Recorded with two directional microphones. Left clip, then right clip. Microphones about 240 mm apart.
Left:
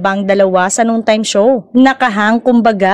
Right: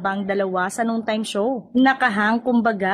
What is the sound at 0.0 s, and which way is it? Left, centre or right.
A woman's voice, left.